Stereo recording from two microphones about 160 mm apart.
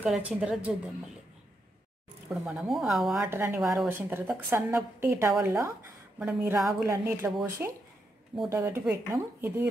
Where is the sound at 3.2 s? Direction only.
15° right (ahead or behind).